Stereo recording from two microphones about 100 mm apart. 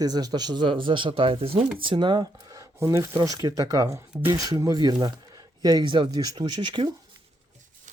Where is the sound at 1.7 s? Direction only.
55° right (ahead or behind).